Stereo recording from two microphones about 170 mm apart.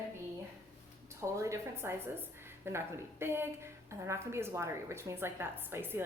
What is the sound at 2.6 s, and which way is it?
A woman's voice, 15° right (ahead or behind).